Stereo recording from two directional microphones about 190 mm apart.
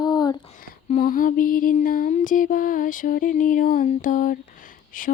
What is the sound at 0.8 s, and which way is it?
Mantra, 40° left (ahead or behind).